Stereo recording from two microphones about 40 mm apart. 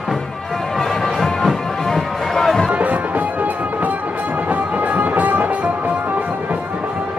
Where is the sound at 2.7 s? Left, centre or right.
Right.